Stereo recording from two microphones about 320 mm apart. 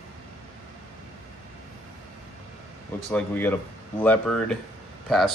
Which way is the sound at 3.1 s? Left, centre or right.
Centre.